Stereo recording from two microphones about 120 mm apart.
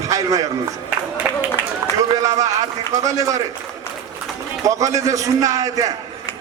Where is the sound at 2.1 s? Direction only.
30° right (ahead or behind).